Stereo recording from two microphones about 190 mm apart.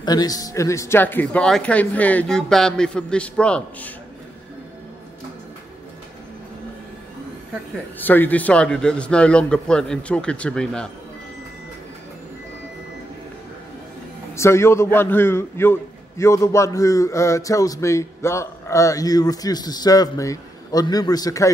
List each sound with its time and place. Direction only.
0.0 s a man's voice: 20° left (ahead or behind)
8.0 s a man's voice: 10° left (ahead or behind)
14.3 s a man's voice: 15° left (ahead or behind)